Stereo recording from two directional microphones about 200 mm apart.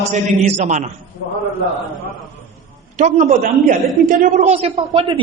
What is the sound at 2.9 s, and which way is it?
A man's voice, 35° right (ahead or behind).